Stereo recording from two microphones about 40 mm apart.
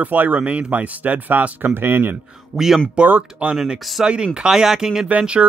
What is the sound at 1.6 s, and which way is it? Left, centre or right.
Speech, right.